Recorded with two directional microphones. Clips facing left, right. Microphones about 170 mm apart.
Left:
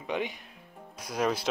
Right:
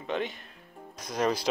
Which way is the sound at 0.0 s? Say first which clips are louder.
Right 1 dB; 10° left (ahead or behind).